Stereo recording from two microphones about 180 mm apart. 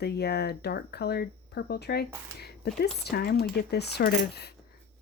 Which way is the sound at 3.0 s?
60° left (ahead or behind).